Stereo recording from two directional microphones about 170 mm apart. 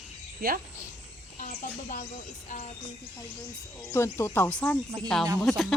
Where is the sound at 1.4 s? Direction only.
45° left (ahead or behind).